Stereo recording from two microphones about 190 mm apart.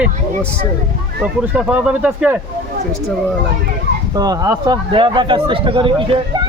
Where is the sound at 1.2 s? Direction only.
5° right (ahead or behind).